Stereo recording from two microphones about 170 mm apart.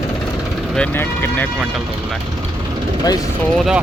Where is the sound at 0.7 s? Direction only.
10° left (ahead or behind).